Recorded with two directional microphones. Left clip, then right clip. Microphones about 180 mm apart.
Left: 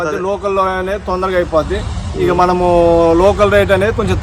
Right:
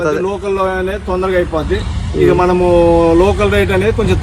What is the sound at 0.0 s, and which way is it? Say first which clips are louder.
Speech: right 1 dB; 15° left (ahead or behind).